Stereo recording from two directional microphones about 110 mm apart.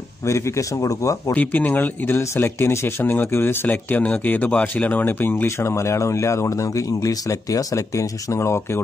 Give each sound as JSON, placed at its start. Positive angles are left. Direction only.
{"t": 0.2, "sound": "speech", "side_deg": 25}
{"t": 1.3, "sound": "speech", "side_deg": 15}